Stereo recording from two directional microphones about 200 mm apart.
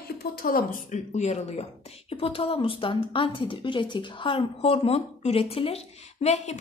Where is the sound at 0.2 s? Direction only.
45° left (ahead or behind).